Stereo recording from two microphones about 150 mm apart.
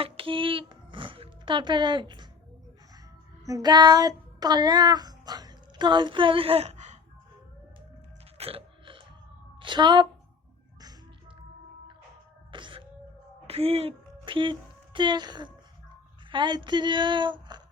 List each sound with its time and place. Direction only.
0.0 s speech: 35° right (ahead or behind)
3.4 s child singing: 25° right (ahead or behind); by 7.0 s 50° right (ahead or behind)
8.4 s burping: 40° right (ahead or behind)
9.6 s a woman's voice: 30° right (ahead or behind)
12.5 s music: 35° right (ahead or behind)
13.5 s a woman's voice: 40° right (ahead or behind)